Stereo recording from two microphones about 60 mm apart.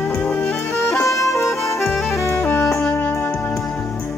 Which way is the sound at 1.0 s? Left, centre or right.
Left.